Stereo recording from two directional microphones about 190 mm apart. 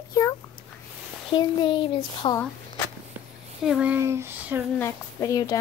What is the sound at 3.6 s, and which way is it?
Child singing, 5° right (ahead or behind).